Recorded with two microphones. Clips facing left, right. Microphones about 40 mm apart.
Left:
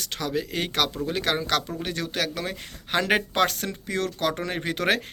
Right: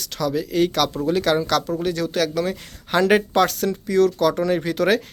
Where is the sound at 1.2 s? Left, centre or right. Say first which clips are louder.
Right 4 dB; left.